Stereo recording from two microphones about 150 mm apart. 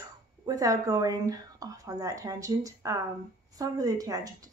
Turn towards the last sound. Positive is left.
turn(degrees=-25)  # may be behind; listen again after turning